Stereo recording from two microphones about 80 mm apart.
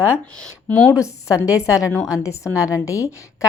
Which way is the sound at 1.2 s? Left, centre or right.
Left.